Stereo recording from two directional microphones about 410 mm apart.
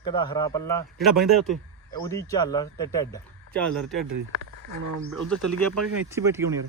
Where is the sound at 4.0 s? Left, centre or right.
Right.